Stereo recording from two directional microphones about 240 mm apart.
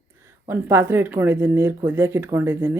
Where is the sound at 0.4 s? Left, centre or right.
Centre.